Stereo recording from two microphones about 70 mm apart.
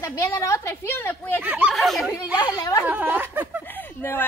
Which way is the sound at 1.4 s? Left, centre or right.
Centre.